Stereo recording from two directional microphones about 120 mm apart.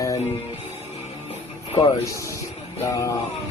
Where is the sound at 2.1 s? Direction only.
25° left (ahead or behind).